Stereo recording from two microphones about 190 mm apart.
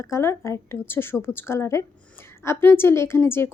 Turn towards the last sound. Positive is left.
turn(degrees=10)  # may be behind; listen again after turning